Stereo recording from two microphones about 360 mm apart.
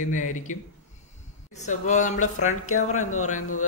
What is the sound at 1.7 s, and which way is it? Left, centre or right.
Speech, centre.